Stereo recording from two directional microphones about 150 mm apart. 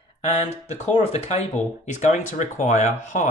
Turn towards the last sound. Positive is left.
turn(degrees=55)  # may be behind; listen again after turning